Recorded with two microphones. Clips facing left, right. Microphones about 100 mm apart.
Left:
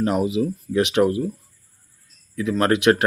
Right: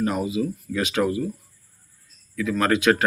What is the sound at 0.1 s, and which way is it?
A man's voice, 20° left (ahead or behind).